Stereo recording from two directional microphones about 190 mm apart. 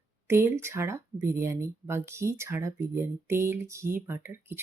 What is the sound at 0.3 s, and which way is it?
Speech, 15° right (ahead or behind).